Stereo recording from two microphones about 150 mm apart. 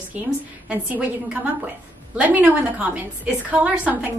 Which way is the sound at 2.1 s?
10° right (ahead or behind).